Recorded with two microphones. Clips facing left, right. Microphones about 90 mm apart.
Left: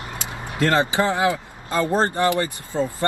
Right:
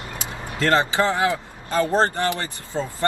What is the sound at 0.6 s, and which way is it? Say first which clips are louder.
Speech: even; 20° left (ahead or behind).